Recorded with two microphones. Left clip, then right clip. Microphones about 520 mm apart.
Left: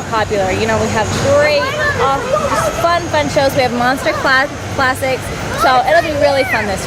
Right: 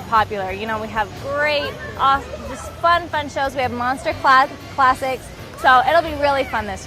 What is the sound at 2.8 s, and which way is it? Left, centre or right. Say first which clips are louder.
Speech: right 1 dB; right.